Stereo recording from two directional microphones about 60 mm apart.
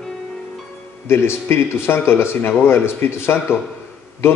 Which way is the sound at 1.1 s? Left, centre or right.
Left.